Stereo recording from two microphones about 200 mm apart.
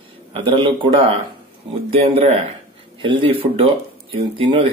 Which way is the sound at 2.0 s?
30° right (ahead or behind).